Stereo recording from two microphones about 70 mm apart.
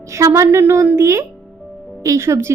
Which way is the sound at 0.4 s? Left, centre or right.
Right.